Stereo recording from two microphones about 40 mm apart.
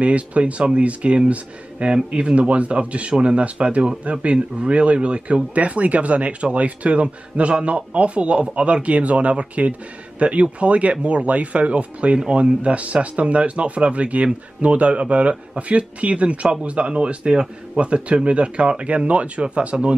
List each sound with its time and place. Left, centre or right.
0.0 s speech: right